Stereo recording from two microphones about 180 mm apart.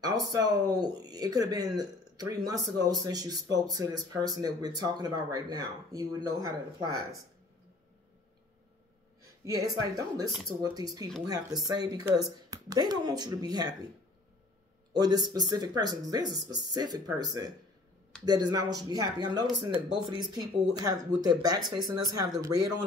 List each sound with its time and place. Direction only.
0.0 s speech: 20° right (ahead or behind)
9.4 s speech: 20° right (ahead or behind)
15.0 s speech: 20° right (ahead or behind)